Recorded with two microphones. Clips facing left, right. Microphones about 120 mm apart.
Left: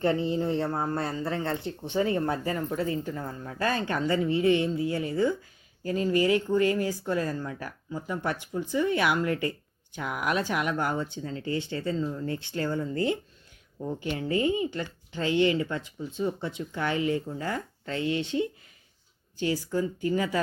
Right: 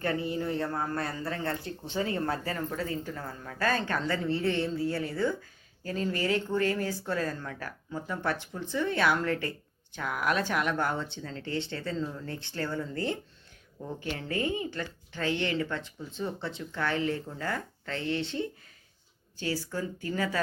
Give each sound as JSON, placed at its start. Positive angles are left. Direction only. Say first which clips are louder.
{"t": 0.0, "sound": "a man's voice", "louder": "left 5 dB", "side_deg": 25}
{"t": 13.8, "sound": "speech", "louder": "left 5 dB", "side_deg": 15}